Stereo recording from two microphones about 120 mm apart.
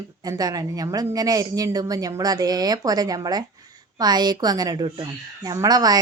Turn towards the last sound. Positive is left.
turn(degrees=-35)  # may be behind; listen again after turning